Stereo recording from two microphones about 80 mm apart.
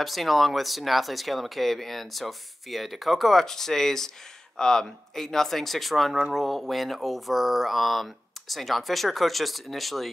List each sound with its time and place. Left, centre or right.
0.0 s speech: centre